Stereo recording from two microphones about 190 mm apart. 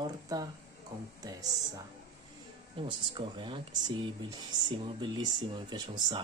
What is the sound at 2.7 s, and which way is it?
Speech, 25° right (ahead or behind).